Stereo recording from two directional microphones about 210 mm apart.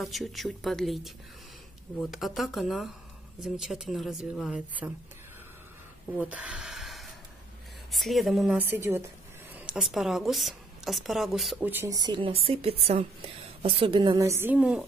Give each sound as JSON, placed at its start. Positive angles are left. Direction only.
{"t": 0.0, "sound": "a woman's voice", "side_deg": 0}
{"t": 6.1, "sound": "a woman's voice", "side_deg": -5}